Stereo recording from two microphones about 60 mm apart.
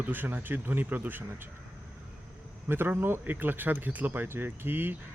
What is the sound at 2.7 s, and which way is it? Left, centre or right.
Speech, right.